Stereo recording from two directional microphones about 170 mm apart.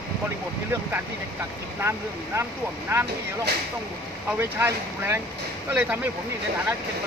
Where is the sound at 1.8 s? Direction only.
15° right (ahead or behind).